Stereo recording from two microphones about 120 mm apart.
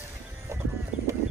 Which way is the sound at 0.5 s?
25° right (ahead or behind).